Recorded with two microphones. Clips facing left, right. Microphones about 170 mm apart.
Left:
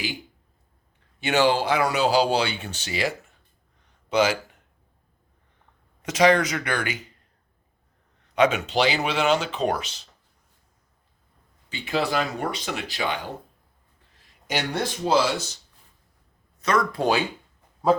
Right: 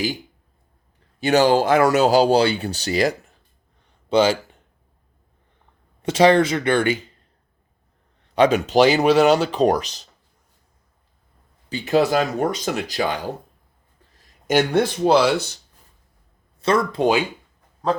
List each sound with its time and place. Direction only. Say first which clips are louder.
1.2 s speech: right 5 dB; 40° right (ahead or behind)
4.1 s speech: right 4 dB; 30° right (ahead or behind)
6.0 s speech: right 4 dB; 30° right (ahead or behind)
8.4 s speech: right 6 dB; 35° right (ahead or behind)
11.7 s speech: right 7 dB; 40° right (ahead or behind); by 15.4 s 60° right (ahead or behind)
16.6 s speech: right 4 dB; 30° right (ahead or behind)
17.8 s speech: left 2 dB; 10° left (ahead or behind)